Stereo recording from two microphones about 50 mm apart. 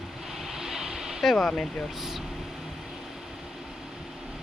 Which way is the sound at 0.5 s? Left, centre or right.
Centre.